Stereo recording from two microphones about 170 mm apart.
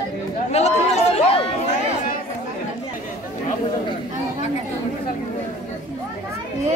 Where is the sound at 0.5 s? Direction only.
40° left (ahead or behind).